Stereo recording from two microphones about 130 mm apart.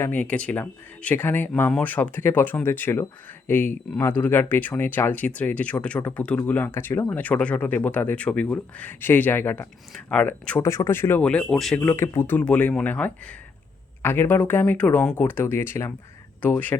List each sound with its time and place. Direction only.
0.0 s speech: 10° left (ahead or behind)
10.6 s speech: 20° left (ahead or behind)
11.2 s speech: 5° left (ahead or behind)
11.8 s speech: 15° left (ahead or behind)